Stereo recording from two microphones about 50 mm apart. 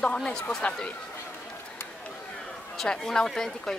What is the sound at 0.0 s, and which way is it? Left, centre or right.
Speech, centre.